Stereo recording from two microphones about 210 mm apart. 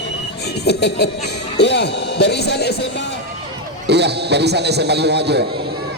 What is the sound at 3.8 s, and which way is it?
A man's voice, 50° right (ahead or behind).